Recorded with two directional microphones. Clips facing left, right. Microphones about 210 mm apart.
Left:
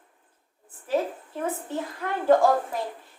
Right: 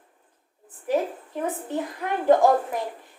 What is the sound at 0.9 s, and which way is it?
Speech, 15° right (ahead or behind).